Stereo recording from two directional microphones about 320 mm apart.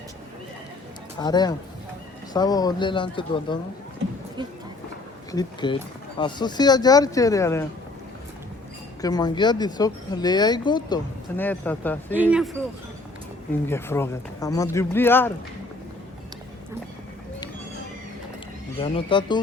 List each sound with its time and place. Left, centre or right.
1.2 s speech: centre
4.4 s speech: centre
5.3 s speech: centre
9.0 s a man's voice: centre
13.7 s speech: centre
18.8 s speech: centre